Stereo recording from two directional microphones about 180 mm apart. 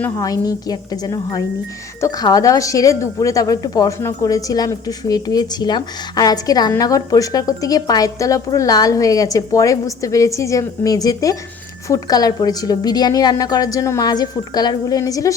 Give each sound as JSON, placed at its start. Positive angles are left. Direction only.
{"t": 0.0, "sound": "a woman's voice", "side_deg": 20}